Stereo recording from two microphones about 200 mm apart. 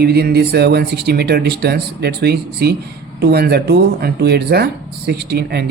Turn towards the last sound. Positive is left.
turn(degrees=-55)  # may be behind; listen again after turning